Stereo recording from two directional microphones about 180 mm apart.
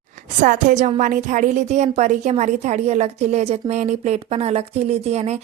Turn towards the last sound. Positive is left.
turn(degrees=-35)  # may be behind; listen again after turning